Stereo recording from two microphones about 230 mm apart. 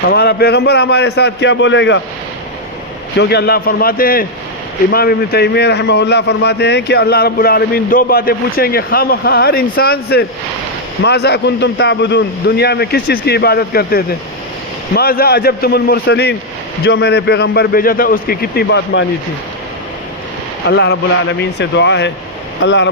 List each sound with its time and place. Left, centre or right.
0.0 s a man's voice: left
3.2 s a man's voice: left
20.7 s a man's voice: left